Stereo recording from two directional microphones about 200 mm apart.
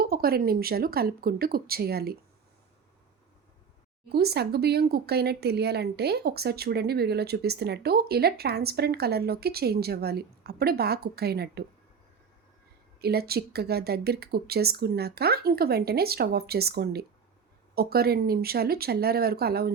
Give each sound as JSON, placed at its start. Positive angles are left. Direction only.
{"t": 0.0, "sound": "speech", "side_deg": -50}
{"t": 4.1, "sound": "speech", "side_deg": -55}
{"t": 13.0, "sound": "speech", "side_deg": -50}